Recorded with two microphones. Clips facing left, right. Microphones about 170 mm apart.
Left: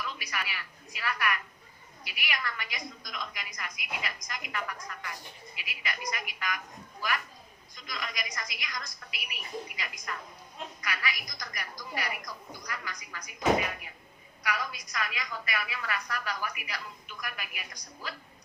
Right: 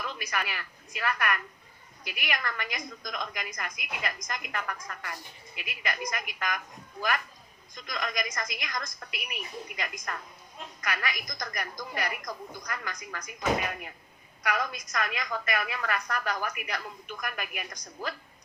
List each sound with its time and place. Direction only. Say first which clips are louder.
0.0 s a woman's voice: right 3 dB; 45° right (ahead or behind)
7.8 s a woman's voice: right 6 dB; 45° right (ahead or behind)
14.4 s a woman's voice: right 4 dB; 45° right (ahead or behind)